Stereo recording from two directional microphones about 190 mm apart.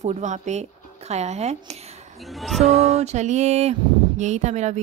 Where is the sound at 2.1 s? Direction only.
Centre (ahead or behind).